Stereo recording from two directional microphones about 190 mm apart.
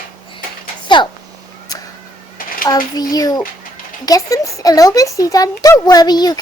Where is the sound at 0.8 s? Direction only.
25° left (ahead or behind).